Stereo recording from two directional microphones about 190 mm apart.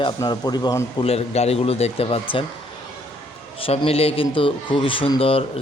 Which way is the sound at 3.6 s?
30° left (ahead or behind).